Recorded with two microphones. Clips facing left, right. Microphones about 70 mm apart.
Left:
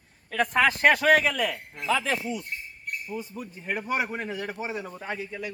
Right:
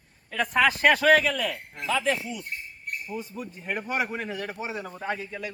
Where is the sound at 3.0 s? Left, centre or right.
Centre.